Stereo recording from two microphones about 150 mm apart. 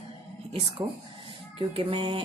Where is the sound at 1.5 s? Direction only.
35° right (ahead or behind).